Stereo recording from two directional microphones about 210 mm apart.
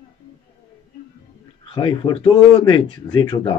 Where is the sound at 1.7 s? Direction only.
25° left (ahead or behind).